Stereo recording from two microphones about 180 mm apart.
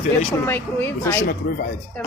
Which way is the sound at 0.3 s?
10° left (ahead or behind).